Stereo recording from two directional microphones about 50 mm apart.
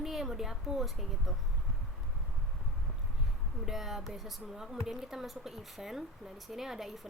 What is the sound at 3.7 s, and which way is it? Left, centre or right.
Speech, centre.